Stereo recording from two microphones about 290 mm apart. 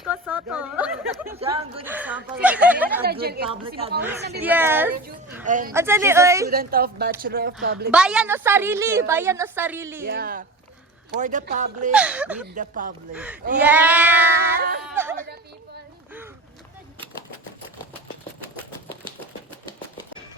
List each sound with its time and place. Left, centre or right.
0.0 s a sound: centre
1.3 s a sound: centre
1.8 s speech: centre
3.0 s speech: right
4.4 s a woman's voice: centre
5.5 s speech: right
5.7 s a woman's voice: centre
6.5 s speech: right
7.9 s a woman's voice: centre
10.0 s speech: right
11.9 s speech: centre
12.5 s speech: right
13.1 s speech: centre
14.6 s speech: right